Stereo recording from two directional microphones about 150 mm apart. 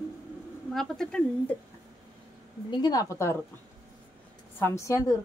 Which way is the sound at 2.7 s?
30° left (ahead or behind).